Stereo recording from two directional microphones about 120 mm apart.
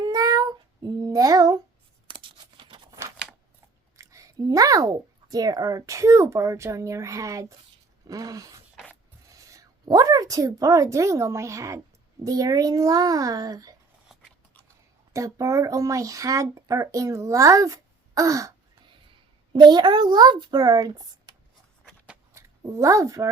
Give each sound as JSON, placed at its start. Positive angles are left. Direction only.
{"t": 0.0, "sound": "child singing", "side_deg": -30}
{"t": 2.0, "sound": "a sound", "side_deg": -45}
{"t": 3.9, "sound": "speech", "side_deg": -25}
{"t": 8.7, "sound": "a sound", "side_deg": 10}
{"t": 9.3, "sound": "speech", "side_deg": -30}
{"t": 14.1, "sound": "biting", "side_deg": -5}
{"t": 15.1, "sound": "speech", "side_deg": -25}
{"t": 19.5, "sound": "speech", "side_deg": -40}
{"t": 22.4, "sound": "a woman's voice", "side_deg": -25}